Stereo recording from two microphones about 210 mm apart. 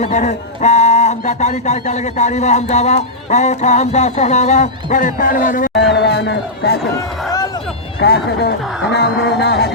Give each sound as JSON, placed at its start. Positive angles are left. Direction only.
{"t": 0.0, "sound": "a man's voice", "side_deg": 35}
{"t": 5.7, "sound": "a sound", "side_deg": 55}
{"t": 7.3, "sound": "run", "side_deg": 20}
{"t": 8.0, "sound": "speech", "side_deg": 50}